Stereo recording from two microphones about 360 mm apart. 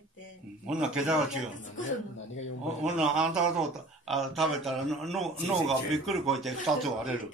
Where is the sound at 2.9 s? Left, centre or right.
Centre.